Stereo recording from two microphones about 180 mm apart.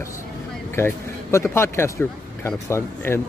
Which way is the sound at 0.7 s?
15° left (ahead or behind).